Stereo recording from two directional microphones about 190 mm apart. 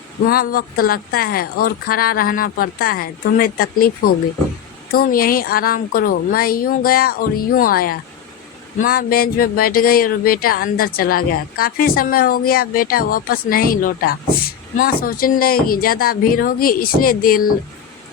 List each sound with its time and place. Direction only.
0.3 s speech: 50° left (ahead or behind)